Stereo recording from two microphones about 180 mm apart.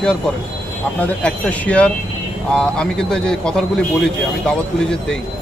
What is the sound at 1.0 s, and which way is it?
A man's voice, 10° left (ahead or behind).